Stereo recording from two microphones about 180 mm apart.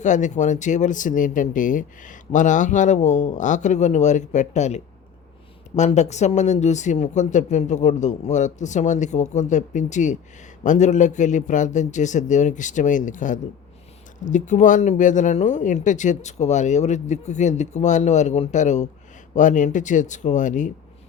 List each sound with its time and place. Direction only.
0.0 s speech: 45° left (ahead or behind)